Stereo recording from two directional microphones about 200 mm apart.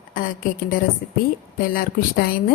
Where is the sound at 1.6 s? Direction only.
45° left (ahead or behind).